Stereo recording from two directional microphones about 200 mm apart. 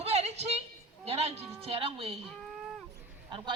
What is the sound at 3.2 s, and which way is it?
Speech, 25° right (ahead or behind).